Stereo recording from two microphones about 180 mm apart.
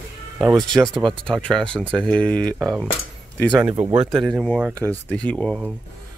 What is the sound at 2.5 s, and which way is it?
Speech, 15° right (ahead or behind).